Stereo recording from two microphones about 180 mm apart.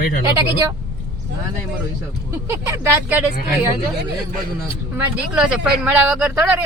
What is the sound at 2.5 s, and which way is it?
Speech, 15° right (ahead or behind).